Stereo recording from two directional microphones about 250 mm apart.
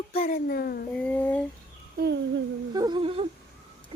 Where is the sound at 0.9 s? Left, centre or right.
Centre.